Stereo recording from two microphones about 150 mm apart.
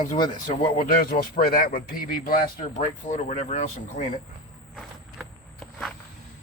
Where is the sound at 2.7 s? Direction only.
45° left (ahead or behind).